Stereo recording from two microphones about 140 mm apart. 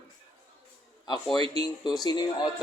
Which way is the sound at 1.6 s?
30° left (ahead or behind).